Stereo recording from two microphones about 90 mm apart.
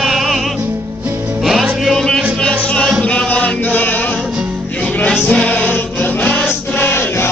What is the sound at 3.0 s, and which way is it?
Chant, 15° left (ahead or behind).